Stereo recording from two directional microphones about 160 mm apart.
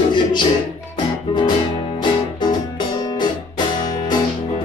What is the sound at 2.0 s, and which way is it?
Music, 25° left (ahead or behind).